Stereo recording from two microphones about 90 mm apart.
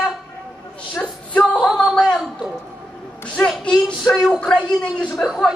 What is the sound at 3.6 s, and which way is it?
A woman's voice, 10° left (ahead or behind).